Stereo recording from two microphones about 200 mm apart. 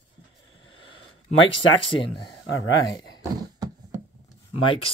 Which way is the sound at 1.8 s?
25° left (ahead or behind).